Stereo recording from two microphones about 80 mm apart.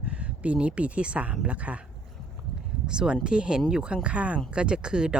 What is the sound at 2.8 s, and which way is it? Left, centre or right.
Speech, centre.